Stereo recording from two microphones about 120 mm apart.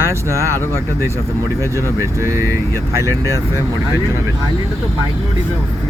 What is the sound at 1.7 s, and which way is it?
Speech, 25° right (ahead or behind).